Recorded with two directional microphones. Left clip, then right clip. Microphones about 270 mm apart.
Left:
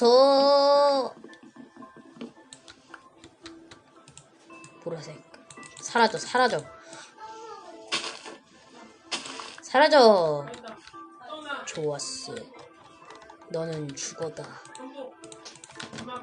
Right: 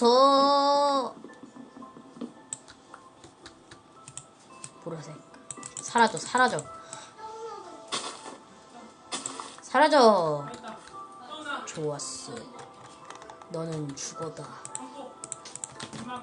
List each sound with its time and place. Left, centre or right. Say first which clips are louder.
0.0 s a sound: left 2 dB; centre
4.9 s music: left 4 dB; centre
5.8 s speech: left 1 dB; centre
7.9 s a sound: left 4 dB; left
9.0 s music: left 2 dB; left
9.6 s a woman's voice: left 2 dB; centre
11.6 s speech: left 2 dB; centre
13.5 s speech: left 3 dB; centre